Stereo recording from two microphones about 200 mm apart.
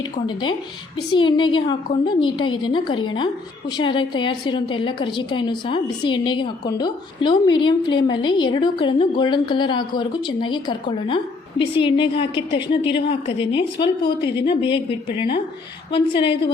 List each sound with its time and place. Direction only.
1.1 s a woman's voice: 25° left (ahead or behind)